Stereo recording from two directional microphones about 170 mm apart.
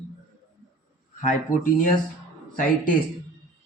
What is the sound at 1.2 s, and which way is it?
Speech, 45° left (ahead or behind).